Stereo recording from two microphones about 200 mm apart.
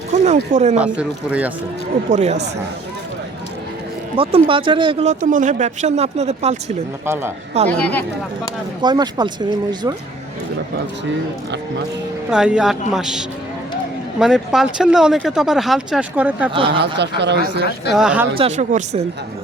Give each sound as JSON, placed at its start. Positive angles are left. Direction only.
{"t": 0.3, "sound": "speech", "side_deg": -35}
{"t": 0.8, "sound": "speech", "side_deg": -5}
{"t": 2.0, "sound": "speech", "side_deg": -35}
{"t": 4.1, "sound": "speech", "side_deg": -30}
{"t": 7.0, "sound": "speech", "side_deg": -10}
{"t": 7.8, "sound": "speech", "side_deg": 5}
{"t": 8.8, "sound": "speech", "side_deg": -20}
{"t": 12.3, "sound": "speech", "side_deg": -5}
{"t": 16.6, "sound": "speech", "side_deg": -25}
{"t": 16.8, "sound": "speech", "side_deg": -60}
{"t": 17.9, "sound": "speech", "side_deg": -5}
{"t": 18.3, "sound": "speech", "side_deg": -35}